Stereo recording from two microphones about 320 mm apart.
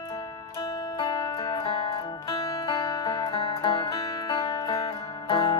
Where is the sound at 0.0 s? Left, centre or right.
Centre.